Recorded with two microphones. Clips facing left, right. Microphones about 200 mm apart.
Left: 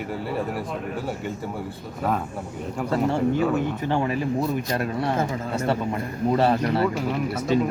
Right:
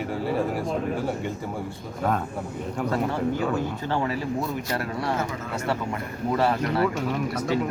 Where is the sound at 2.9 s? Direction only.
25° left (ahead or behind).